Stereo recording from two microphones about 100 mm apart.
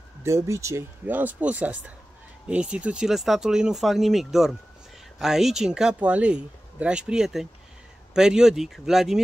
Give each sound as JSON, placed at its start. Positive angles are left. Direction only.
{"t": 0.2, "sound": "speech", "side_deg": -30}
{"t": 1.0, "sound": "speech", "side_deg": -15}